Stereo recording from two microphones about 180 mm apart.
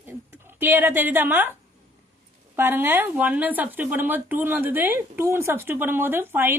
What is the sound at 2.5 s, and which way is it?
Speech, 10° right (ahead or behind).